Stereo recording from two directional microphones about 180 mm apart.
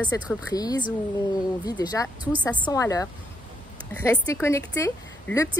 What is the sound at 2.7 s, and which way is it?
Speech, 20° left (ahead or behind).